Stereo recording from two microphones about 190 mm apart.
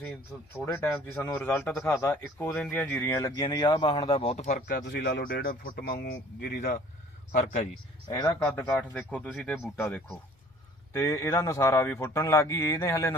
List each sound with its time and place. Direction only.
0.5 s a man's voice: 10° left (ahead or behind); by 4.8 s 35° left (ahead or behind)
4.9 s speech: 65° left (ahead or behind)
5.2 s a man's voice: 45° left (ahead or behind)
7.3 s a man's voice: 35° left (ahead or behind)
8.0 s a man's voice: 20° left (ahead or behind)